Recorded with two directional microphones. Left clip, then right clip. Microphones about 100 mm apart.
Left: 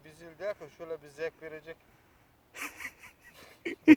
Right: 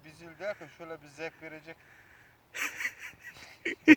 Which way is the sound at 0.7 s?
70° left (ahead or behind).